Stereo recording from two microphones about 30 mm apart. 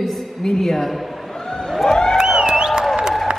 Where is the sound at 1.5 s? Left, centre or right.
Left.